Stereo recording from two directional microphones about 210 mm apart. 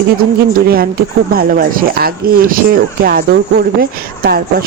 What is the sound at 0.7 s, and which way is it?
Speech, 45° right (ahead or behind).